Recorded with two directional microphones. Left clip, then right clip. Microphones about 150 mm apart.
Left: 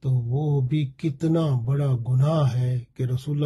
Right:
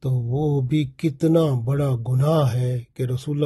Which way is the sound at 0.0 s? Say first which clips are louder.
Right 5 dB; 50° right (ahead or behind).